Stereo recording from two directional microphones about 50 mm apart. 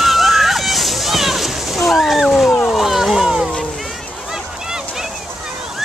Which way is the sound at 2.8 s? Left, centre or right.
Centre.